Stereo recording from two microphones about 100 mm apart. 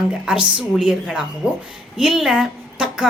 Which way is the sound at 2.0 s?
Centre (ahead or behind).